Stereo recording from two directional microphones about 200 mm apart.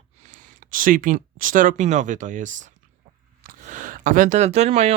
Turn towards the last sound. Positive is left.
turn(degrees=-35)  # may be behind; listen again after turning